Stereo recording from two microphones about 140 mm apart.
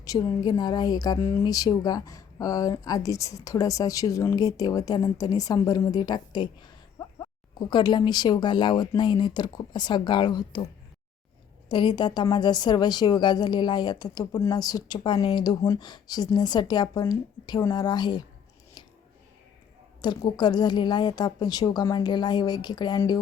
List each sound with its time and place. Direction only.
0.0 s a woman's voice: 25° left (ahead or behind)
11.7 s a woman's voice: 35° left (ahead or behind)
20.1 s a woman's voice: 30° left (ahead or behind)